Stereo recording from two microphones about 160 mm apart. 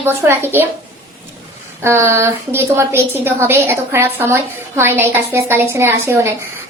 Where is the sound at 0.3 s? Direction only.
15° right (ahead or behind).